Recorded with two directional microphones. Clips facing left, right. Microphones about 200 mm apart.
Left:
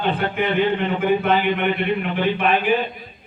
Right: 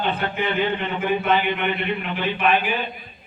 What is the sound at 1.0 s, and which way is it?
A man's voice, 55° left (ahead or behind).